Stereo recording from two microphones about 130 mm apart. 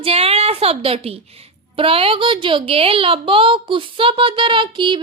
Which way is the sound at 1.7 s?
45° right (ahead or behind).